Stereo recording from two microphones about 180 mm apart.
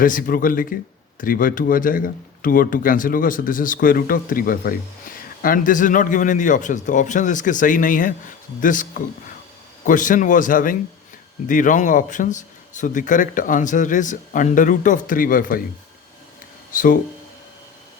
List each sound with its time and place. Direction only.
0.0 s a man's voice: 50° left (ahead or behind)
16.7 s a man's voice: 50° left (ahead or behind)